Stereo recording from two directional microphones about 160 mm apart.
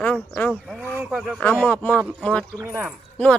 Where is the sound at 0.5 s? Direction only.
5° right (ahead or behind).